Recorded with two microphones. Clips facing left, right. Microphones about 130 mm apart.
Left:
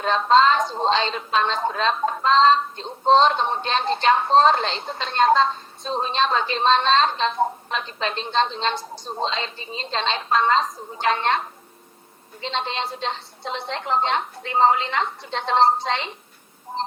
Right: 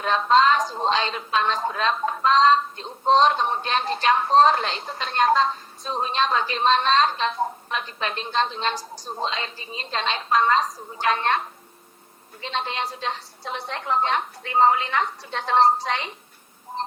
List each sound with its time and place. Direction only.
0.0 s a woman's voice: 30° left (ahead or behind)
12.4 s a woman's voice: 25° left (ahead or behind)